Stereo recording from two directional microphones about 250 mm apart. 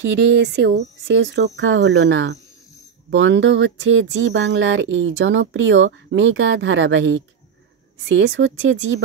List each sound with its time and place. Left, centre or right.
0.0 s speech: right